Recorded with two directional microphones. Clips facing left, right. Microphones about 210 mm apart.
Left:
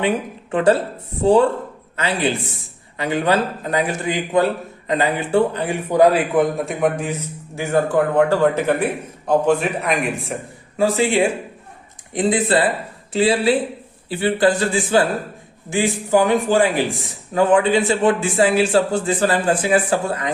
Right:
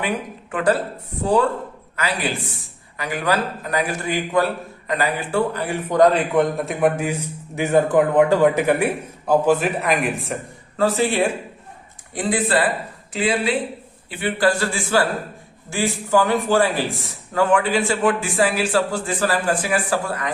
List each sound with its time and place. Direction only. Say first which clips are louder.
0.5 s a man's voice: left 4 dB; 25° left (ahead or behind); by 10.3 s centre (ahead or behind)
10.8 s a man's voice: left 2 dB; 15° left (ahead or behind)